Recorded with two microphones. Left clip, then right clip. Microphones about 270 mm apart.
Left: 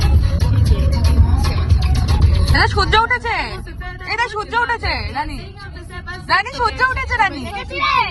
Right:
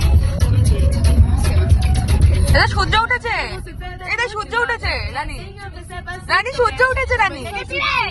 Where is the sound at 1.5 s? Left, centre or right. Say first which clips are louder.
Right 1 dB; right.